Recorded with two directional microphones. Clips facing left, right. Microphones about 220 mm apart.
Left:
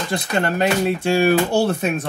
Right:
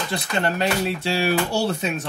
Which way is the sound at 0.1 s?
50° left (ahead or behind).